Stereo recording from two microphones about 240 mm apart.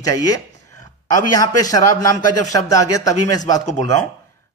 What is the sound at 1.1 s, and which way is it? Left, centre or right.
A man's voice, centre.